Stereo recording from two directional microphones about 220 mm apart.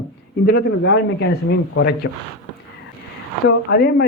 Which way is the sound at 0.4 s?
45° left (ahead or behind).